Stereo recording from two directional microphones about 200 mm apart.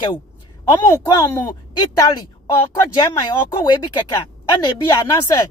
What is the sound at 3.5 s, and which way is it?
Speech, 20° left (ahead or behind).